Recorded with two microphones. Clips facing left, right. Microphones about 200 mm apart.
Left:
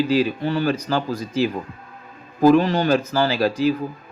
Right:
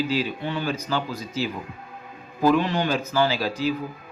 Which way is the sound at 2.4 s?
45° left (ahead or behind).